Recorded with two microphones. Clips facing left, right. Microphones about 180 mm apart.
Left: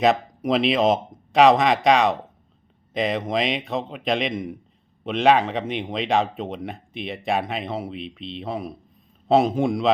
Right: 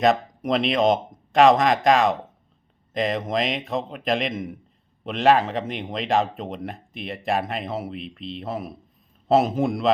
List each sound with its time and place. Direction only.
0.0 s speech: centre (ahead or behind)